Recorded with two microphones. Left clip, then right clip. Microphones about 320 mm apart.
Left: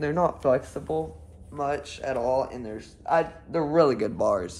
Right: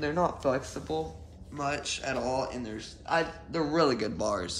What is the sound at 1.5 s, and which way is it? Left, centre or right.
Speech, centre.